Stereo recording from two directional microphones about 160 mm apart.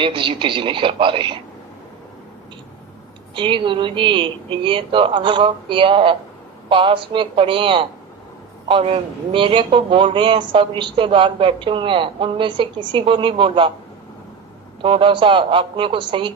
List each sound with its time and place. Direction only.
0.0 s speech: 30° right (ahead or behind)
3.3 s speech: 30° right (ahead or behind)
14.8 s speech: 30° right (ahead or behind)